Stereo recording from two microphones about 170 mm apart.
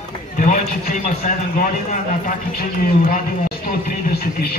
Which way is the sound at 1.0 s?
50° left (ahead or behind).